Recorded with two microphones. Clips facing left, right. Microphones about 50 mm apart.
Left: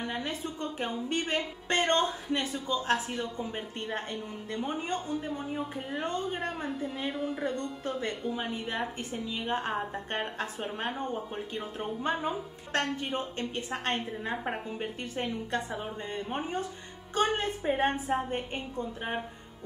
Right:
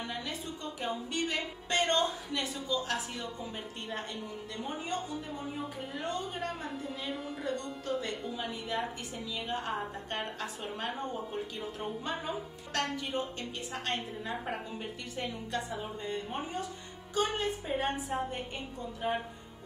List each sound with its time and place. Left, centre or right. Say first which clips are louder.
0.1 s a woman's voice: left 4 dB; left
6.0 s a woman's voice: left 2 dB; left
7.1 s a woman's voice: left 5 dB; centre
7.4 s a woman's voice: left 2 dB; left
17.1 s a woman's voice: left 3 dB; left